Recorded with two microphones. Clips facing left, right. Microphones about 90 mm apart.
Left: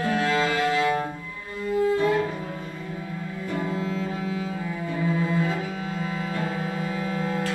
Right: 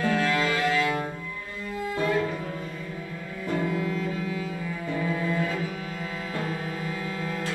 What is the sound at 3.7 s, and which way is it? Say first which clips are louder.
Music: even; 25° left (ahead or behind).